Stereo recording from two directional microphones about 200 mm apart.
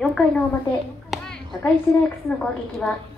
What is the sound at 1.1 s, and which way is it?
Clapping, 5° left (ahead or behind).